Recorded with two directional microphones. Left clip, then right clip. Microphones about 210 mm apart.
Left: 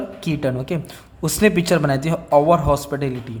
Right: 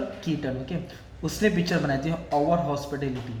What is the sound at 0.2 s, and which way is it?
A man's voice, 45° left (ahead or behind).